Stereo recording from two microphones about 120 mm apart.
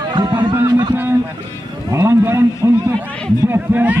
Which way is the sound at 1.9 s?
20° right (ahead or behind).